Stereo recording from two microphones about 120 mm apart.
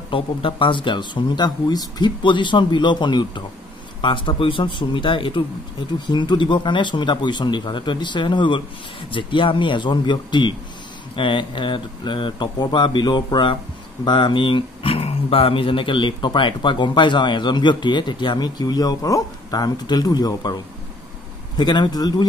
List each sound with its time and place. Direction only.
0.1 s speech: 45° left (ahead or behind)